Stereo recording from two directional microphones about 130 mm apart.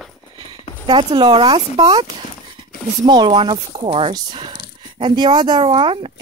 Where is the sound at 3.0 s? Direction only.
35° right (ahead or behind).